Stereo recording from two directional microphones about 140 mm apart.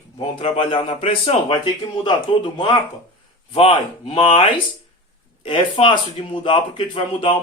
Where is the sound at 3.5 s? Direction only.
45° left (ahead or behind).